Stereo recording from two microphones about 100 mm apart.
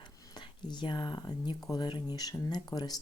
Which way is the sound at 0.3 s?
45° left (ahead or behind).